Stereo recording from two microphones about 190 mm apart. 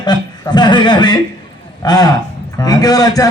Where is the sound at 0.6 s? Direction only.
25° left (ahead or behind).